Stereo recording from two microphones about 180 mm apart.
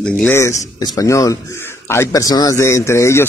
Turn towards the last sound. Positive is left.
turn(degrees=15)  # may be behind; listen again after turning